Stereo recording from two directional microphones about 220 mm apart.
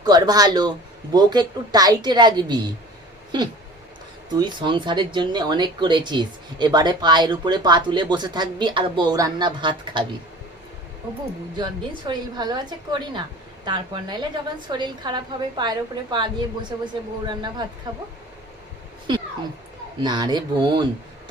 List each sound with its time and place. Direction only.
0.0 s speech: 15° right (ahead or behind)
4.3 s speech: 20° right (ahead or behind)
11.5 s speech: 20° right (ahead or behind)
20.0 s speech: 20° right (ahead or behind)